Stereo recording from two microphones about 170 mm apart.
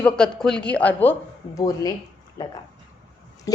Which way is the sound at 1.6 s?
20° left (ahead or behind).